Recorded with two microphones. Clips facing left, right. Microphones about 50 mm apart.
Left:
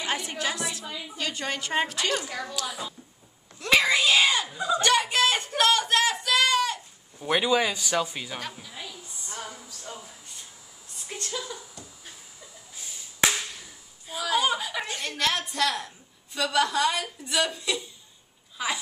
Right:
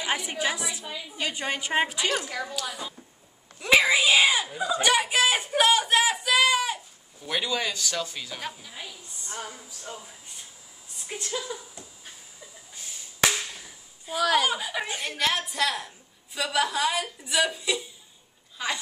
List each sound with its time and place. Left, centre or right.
0.3 s a woman's voice: centre
2.5 s a woman's voice: centre
7.2 s a man's voice: left
8.6 s a woman's voice: centre
9.3 s a sound: centre
14.2 s speech: right
14.5 s a woman's voice: centre